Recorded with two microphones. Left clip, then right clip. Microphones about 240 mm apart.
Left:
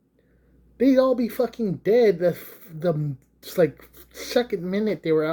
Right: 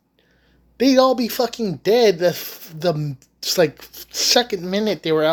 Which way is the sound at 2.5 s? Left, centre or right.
Centre.